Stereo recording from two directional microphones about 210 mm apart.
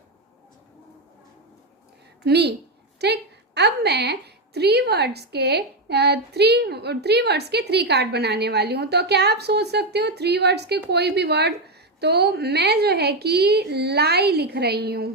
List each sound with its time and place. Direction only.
2.2 s a woman's voice: 50° right (ahead or behind)